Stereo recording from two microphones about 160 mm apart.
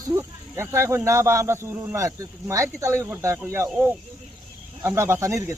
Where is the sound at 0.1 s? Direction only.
15° right (ahead or behind).